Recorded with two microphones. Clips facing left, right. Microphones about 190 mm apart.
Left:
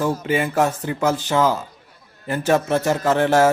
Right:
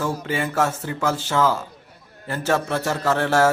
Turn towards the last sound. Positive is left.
turn(degrees=20)  # may be behind; listen again after turning